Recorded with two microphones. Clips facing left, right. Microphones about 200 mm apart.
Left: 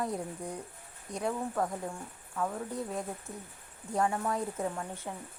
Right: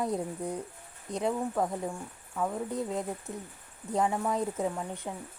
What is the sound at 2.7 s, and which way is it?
Speech, 20° right (ahead or behind).